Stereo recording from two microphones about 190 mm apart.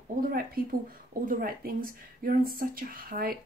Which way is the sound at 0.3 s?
50° right (ahead or behind).